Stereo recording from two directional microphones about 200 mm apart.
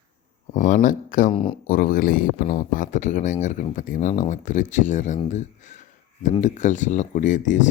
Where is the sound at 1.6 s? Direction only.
45° left (ahead or behind).